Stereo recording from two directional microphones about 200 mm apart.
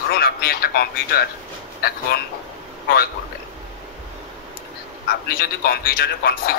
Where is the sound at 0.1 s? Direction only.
50° left (ahead or behind).